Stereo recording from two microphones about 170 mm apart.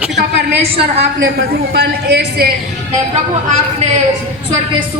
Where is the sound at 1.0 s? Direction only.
80° right.